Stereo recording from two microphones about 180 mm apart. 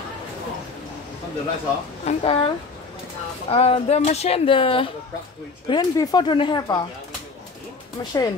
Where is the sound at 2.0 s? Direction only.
30° left (ahead or behind).